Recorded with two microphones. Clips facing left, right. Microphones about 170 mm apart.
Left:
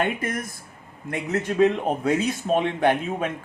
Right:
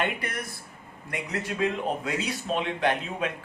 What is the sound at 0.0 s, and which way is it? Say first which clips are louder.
Speech: left 5 dB; 45° left (ahead or behind).